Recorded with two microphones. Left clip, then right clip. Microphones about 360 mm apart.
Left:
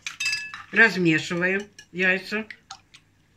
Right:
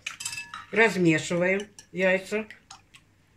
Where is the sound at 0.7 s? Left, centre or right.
Centre.